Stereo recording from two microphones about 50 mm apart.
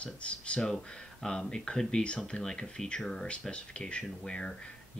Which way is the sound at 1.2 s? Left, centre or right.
Centre.